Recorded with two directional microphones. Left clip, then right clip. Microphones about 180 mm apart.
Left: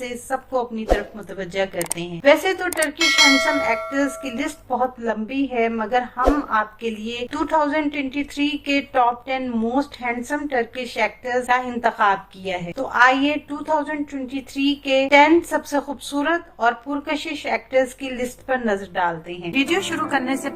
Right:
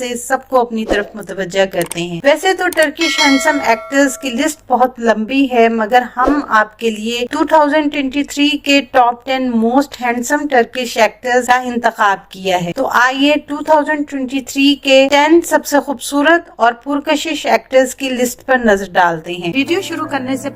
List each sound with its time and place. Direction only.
0.0 s a woman's voice: 40° right (ahead or behind)
3.0 s a sound: centre (ahead or behind)
3.9 s a woman's voice: 40° right (ahead or behind)
19.5 s a woman's voice: 15° right (ahead or behind)